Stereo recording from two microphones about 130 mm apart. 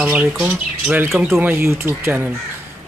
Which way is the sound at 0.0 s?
10° right (ahead or behind).